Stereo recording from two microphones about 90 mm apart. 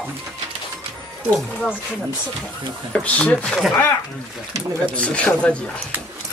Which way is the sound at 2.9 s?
15° left (ahead or behind).